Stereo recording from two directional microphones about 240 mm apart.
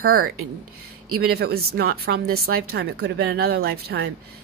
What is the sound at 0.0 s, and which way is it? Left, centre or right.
Speech, right.